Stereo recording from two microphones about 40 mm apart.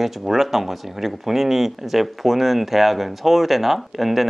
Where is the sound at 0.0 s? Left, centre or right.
Centre.